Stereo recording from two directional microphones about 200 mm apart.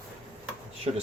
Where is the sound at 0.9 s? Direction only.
30° right (ahead or behind).